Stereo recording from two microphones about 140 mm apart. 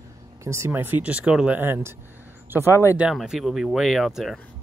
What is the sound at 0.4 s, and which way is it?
Speech, 20° right (ahead or behind).